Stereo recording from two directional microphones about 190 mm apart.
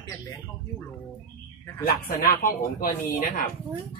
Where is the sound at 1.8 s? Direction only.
50° left (ahead or behind).